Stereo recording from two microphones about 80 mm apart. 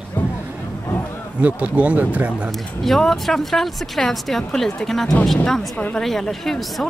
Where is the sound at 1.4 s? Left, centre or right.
Centre.